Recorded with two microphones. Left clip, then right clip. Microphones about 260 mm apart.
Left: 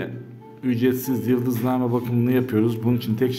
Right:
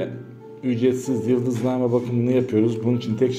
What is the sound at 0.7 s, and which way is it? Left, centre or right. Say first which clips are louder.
A man's voice: right 1 dB; centre.